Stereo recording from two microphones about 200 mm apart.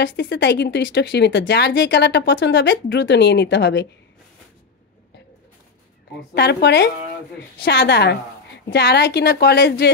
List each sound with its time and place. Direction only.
0.0 s speech: 60° left (ahead or behind)
6.3 s speech: 55° left (ahead or behind)